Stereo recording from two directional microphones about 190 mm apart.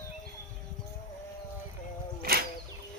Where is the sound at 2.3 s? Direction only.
55° right (ahead or behind).